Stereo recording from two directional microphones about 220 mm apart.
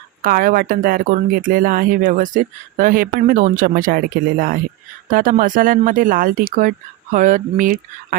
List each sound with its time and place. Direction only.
0.2 s speech: 40° right (ahead or behind)